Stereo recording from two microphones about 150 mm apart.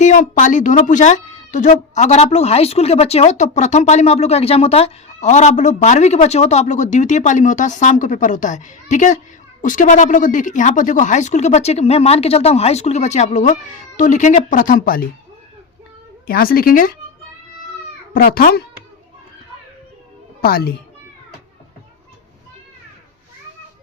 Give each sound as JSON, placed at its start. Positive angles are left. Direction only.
{"t": 0.0, "sound": "speech", "side_deg": 55}
{"t": 16.2, "sound": "speech", "side_deg": 85}
{"t": 18.1, "sound": "speech", "side_deg": 80}
{"t": 20.4, "sound": "speech", "side_deg": 85}